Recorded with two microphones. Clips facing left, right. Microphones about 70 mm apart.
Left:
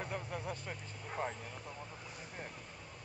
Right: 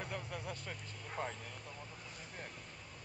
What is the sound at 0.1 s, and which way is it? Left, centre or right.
Vehicle, left.